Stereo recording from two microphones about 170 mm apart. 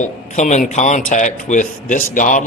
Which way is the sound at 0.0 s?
45° left (ahead or behind).